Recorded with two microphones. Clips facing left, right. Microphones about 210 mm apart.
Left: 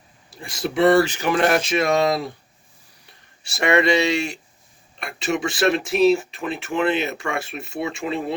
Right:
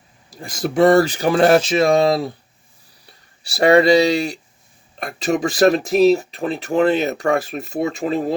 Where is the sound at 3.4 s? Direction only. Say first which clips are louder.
Right 6 dB; 35° right (ahead or behind).